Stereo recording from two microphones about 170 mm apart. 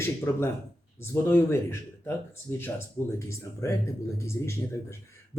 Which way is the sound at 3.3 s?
15° left (ahead or behind).